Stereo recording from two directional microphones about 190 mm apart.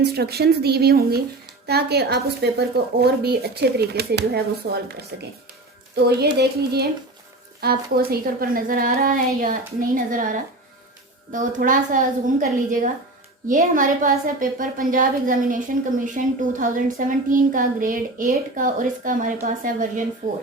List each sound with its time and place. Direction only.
0.0 s a woman's voice: 60° right (ahead or behind)
6.1 s a woman's voice: 60° right (ahead or behind)